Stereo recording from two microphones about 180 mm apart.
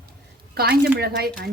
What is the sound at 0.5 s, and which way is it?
Speech, 60° right (ahead or behind).